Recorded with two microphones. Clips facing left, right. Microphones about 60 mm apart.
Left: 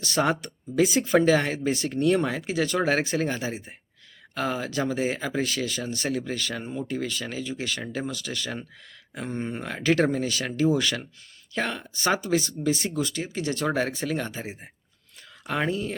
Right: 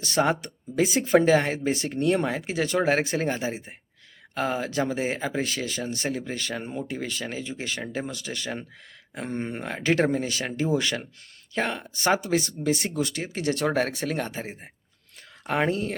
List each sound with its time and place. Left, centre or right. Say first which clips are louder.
0.1 s speech: right 1 dB; centre
0.8 s speech: even; right
15.7 s speech: right 1 dB; right